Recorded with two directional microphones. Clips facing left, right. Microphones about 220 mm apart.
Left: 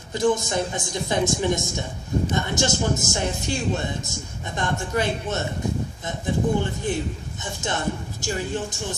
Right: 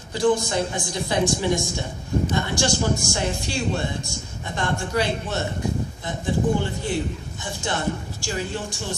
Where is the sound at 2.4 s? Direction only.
20° left (ahead or behind).